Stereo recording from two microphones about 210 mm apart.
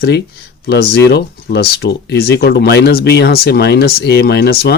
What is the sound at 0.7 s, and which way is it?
Speech, 50° left (ahead or behind).